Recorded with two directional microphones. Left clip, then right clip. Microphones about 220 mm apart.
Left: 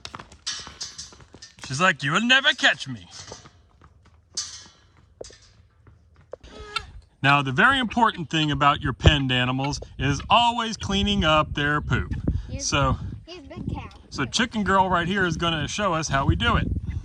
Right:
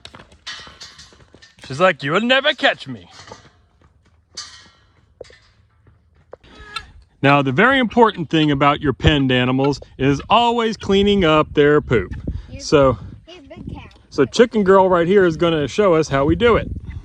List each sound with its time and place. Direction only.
0.1 s music: 5° left (ahead or behind)
0.4 s music: 30° left (ahead or behind)
1.1 s a sound: centre (ahead or behind)
1.6 s speech: 15° left (ahead or behind)
3.1 s mechanisms: 30° left (ahead or behind)
6.4 s livestock: 15° left (ahead or behind)
8.2 s speech: 20° left (ahead or behind)
12.3 s a sound: 15° left (ahead or behind)
13.9 s speech: 15° left (ahead or behind)